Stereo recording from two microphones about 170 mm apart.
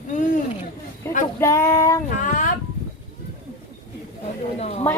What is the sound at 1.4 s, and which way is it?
Speech, 20° left (ahead or behind).